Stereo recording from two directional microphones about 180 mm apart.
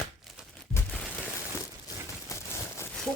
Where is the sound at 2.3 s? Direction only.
15° left (ahead or behind).